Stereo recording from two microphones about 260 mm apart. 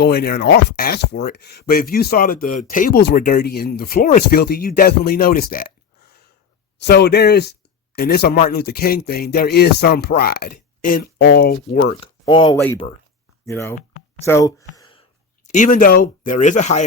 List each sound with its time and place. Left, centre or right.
0.0 s speech: left
6.7 s speech: left
11.9 s speech: centre
13.7 s a sound: left
14.3 s speech: centre
14.8 s a sound: centre
15.4 s speech: left